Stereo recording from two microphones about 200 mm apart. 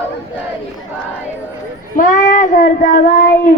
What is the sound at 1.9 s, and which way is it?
Child singing, 40° left (ahead or behind).